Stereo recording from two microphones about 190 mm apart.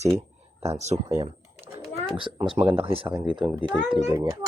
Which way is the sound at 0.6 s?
35° right (ahead or behind).